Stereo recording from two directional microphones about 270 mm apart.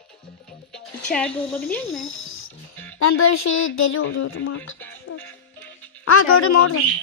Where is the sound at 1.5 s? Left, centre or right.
Centre.